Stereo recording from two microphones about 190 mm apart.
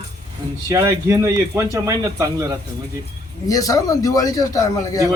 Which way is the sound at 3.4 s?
20° left (ahead or behind).